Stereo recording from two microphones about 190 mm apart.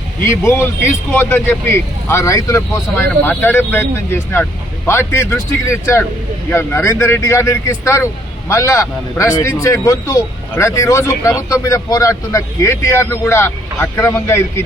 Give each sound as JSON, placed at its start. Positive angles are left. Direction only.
{"t": 0.3, "sound": "a man's voice", "side_deg": 15}